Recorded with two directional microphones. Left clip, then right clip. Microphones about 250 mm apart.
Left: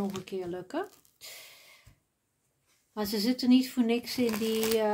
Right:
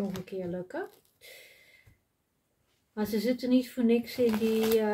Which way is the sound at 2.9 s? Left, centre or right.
Left.